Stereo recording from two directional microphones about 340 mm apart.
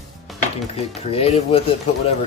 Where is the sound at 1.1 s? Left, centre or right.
Centre.